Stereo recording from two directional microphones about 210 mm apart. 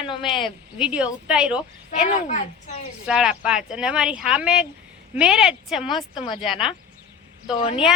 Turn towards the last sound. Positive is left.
turn(degrees=30)  # may be behind; listen again after turning